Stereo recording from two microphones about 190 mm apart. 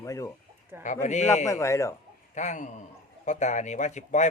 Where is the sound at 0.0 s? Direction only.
15° left (ahead or behind).